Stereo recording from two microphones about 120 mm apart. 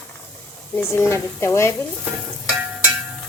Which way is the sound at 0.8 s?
20° left (ahead or behind).